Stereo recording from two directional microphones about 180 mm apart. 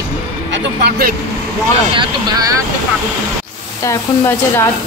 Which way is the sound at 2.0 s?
20° right (ahead or behind).